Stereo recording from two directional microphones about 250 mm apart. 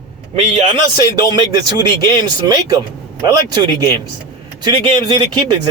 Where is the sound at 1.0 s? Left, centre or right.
Centre.